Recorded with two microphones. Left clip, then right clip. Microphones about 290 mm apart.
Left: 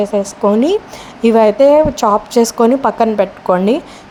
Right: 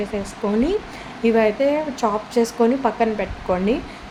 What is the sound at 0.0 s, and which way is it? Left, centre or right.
A woman's voice, left.